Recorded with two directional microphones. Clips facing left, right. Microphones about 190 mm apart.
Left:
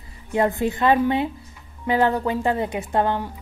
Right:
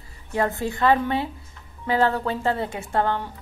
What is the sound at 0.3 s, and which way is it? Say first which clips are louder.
A woman's voice: left 4 dB; 15° left (ahead or behind).